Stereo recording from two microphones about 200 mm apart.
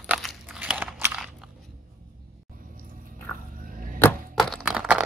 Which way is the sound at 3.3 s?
15° left (ahead or behind).